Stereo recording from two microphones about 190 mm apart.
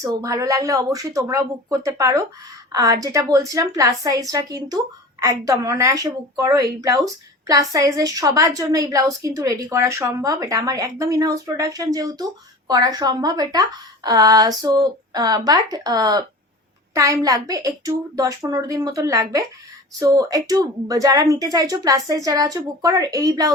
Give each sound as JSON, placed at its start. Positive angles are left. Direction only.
{"t": 0.0, "sound": "a woman's voice", "side_deg": -15}